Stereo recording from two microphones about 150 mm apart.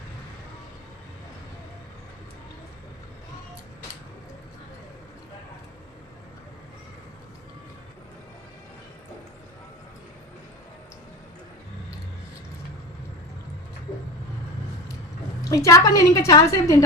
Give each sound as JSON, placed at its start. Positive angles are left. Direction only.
{"t": 15.4, "sound": "a woman's voice", "side_deg": 20}